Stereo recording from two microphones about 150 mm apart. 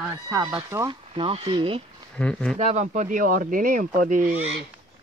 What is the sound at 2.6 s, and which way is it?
Speech, 50° right (ahead or behind).